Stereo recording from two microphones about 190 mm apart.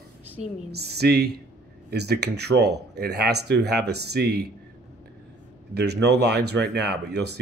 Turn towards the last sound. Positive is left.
turn(degrees=-60)  # may be behind; listen again after turning